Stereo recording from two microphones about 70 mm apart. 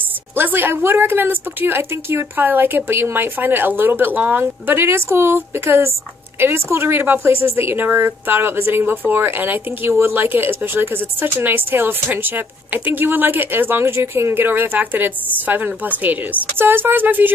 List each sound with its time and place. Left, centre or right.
0.4 s a woman's voice: right